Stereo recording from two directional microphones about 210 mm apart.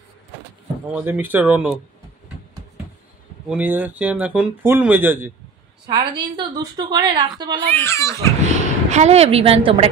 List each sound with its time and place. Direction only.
0.9 s speech: 10° right (ahead or behind)
3.4 s speech: 5° right (ahead or behind)
5.9 s a woman's voice: 20° right (ahead or behind)
7.7 s a child's voice: 10° left (ahead or behind)
8.5 s a woman's voice: 35° right (ahead or behind)